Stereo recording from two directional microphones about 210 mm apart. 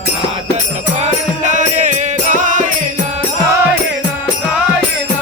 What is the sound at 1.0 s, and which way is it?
Music, 35° right (ahead or behind).